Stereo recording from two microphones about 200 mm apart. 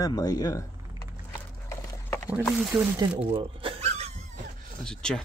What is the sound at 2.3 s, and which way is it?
Speech, 5° right (ahead or behind).